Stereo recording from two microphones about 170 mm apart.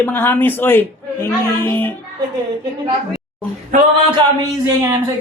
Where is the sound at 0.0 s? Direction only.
10° left (ahead or behind).